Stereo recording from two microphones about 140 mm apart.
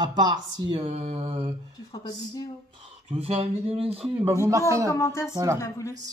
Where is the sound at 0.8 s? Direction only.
55° right (ahead or behind).